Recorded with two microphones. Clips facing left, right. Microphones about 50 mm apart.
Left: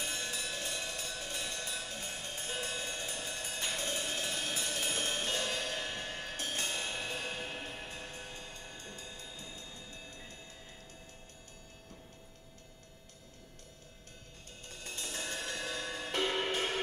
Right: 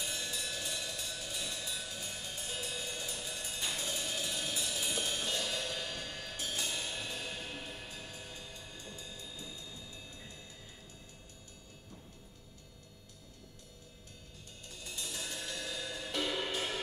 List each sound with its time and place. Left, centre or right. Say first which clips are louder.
0.0 s a sound: left 1 dB; left
3.5 s music: left 2 dB; left
14.7 s music: left 1 dB; left